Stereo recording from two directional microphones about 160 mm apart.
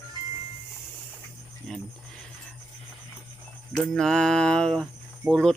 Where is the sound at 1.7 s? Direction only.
Centre (ahead or behind).